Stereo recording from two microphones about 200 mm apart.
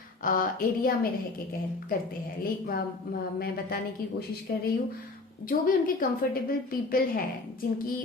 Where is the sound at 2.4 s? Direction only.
50° left (ahead or behind).